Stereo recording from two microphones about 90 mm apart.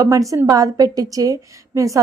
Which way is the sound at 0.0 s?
35° right (ahead or behind).